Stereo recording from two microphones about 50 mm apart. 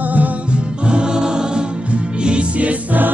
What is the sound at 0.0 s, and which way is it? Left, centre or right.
Music, right.